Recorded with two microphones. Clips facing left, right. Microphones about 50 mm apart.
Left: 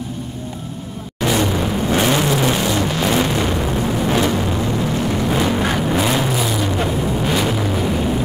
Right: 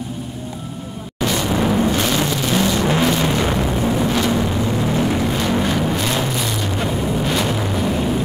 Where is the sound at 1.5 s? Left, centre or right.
Centre.